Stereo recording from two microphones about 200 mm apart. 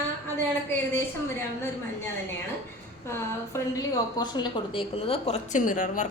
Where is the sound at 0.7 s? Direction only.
10° left (ahead or behind).